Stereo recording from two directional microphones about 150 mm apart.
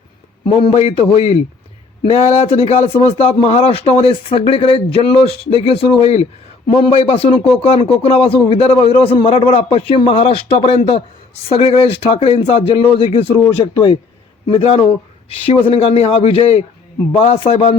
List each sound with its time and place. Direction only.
0.4 s a man's voice: 35° left (ahead or behind)
14.4 s a man's voice: 40° left (ahead or behind)